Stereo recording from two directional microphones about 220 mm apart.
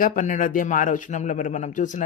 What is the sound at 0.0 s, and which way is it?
Speech, 35° left (ahead or behind).